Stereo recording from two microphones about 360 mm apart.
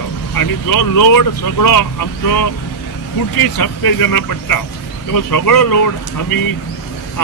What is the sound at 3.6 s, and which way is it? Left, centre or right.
Speech, left.